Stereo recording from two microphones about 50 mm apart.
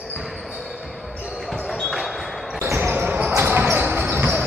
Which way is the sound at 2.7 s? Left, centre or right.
Right.